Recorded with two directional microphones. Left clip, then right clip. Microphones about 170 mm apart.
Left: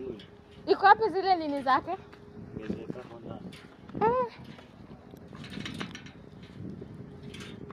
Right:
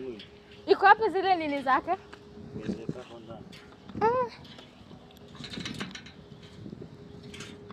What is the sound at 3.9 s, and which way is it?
Dog, 15° left (ahead or behind).